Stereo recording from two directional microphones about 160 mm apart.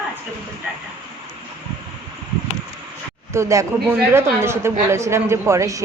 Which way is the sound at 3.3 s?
20° right (ahead or behind).